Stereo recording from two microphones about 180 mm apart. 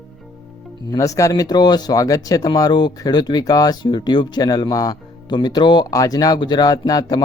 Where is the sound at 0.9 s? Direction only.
20° left (ahead or behind).